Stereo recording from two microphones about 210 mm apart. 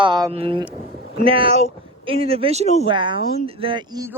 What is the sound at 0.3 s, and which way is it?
Speech, 25° right (ahead or behind).